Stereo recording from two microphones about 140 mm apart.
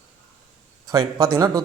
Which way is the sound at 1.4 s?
20° right (ahead or behind).